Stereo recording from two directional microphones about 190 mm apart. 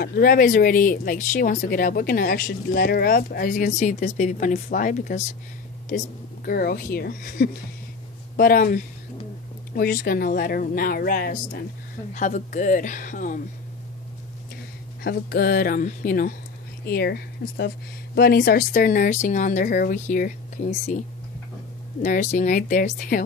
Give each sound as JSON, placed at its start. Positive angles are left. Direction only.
{"t": 0.0, "sound": "speech", "side_deg": 50}
{"t": 12.1, "sound": "speech", "side_deg": 40}
{"t": 15.0, "sound": "speech", "side_deg": 55}
{"t": 22.0, "sound": "speech", "side_deg": 40}